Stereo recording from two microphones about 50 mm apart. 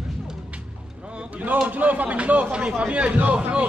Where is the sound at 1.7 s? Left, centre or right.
Right.